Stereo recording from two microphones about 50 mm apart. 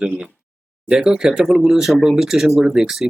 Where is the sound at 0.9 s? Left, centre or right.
Centre.